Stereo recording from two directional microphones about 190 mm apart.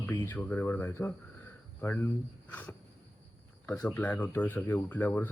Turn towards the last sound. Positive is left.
turn(degrees=10)  # may be behind; listen again after turning